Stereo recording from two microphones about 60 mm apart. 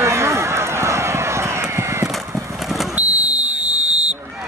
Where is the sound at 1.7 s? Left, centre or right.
Right.